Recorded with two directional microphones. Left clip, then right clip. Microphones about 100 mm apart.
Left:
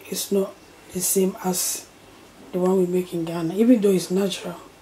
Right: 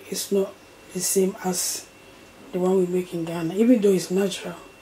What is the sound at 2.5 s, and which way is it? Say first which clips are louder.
Speech: left 1 dB; 10° left (ahead or behind).